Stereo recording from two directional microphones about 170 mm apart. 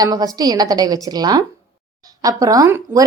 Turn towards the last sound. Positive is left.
turn(degrees=-20)  # may be behind; listen again after turning